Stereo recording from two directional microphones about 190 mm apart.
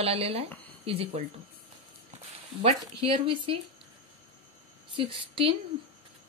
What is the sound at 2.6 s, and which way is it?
Speech, 30° right (ahead or behind).